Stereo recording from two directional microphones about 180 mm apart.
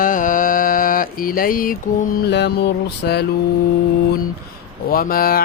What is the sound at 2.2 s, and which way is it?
Mantra, 70° left (ahead or behind).